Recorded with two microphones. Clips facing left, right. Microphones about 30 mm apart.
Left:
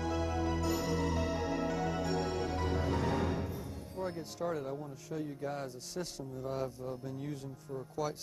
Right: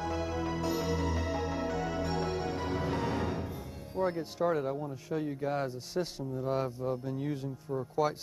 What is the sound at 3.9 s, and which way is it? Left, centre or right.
Speech, right.